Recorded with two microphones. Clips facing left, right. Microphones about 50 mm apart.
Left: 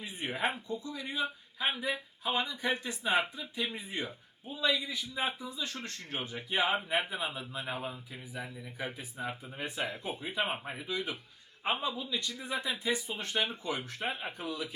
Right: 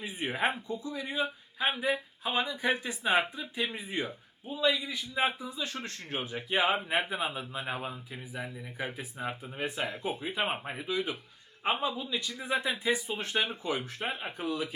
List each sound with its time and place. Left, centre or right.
0.0 s a man's voice: centre
3.0 s a man's voice: centre
5.1 s a man's voice: centre
10.4 s speech: right
10.7 s a man's voice: centre